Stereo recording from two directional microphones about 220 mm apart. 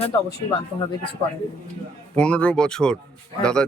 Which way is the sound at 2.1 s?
5° left (ahead or behind).